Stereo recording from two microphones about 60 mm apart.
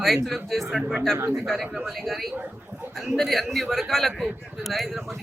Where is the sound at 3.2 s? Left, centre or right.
Centre.